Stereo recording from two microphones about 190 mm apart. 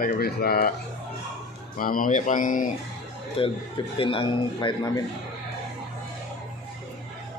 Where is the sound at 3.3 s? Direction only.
30° left (ahead or behind).